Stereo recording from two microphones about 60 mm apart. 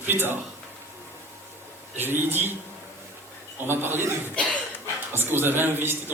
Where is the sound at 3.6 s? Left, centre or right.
Right.